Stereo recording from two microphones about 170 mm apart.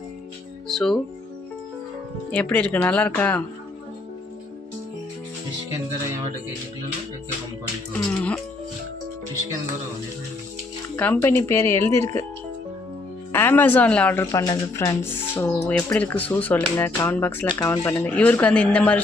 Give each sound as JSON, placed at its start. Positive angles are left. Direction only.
{"t": 0.7, "sound": "speech", "side_deg": 5}
{"t": 2.3, "sound": "speech", "side_deg": 5}
{"t": 7.9, "sound": "speech", "side_deg": 10}
{"t": 10.8, "sound": "speech", "side_deg": 10}
{"t": 13.3, "sound": "speech", "side_deg": 10}